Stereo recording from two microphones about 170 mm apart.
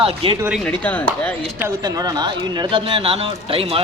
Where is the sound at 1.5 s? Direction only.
20° right (ahead or behind).